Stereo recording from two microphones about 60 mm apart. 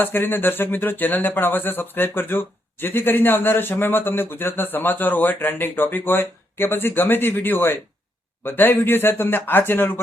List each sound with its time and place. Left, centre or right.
0.0 s speech: left